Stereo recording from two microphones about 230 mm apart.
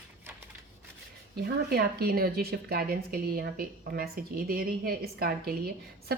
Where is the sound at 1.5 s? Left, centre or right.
Right.